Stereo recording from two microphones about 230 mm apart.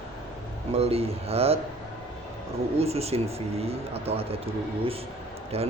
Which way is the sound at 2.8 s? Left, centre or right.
Right.